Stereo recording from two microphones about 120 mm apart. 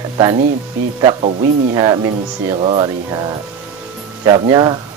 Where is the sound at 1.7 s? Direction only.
30° right (ahead or behind).